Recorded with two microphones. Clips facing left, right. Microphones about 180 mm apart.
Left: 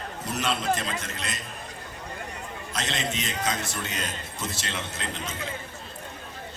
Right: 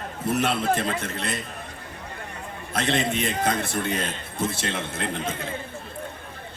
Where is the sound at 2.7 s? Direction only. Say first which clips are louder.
Right 7 dB; 60° right (ahead or behind).